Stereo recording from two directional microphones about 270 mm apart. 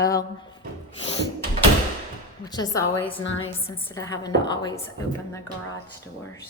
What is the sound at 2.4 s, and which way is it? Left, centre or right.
A woman's voice, centre.